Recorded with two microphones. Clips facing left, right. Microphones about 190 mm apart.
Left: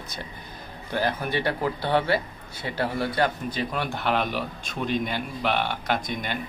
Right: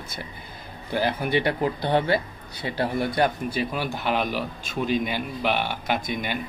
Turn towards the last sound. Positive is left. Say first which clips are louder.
# right 1 dB
turn(degrees=-5)  # may be behind; listen again after turning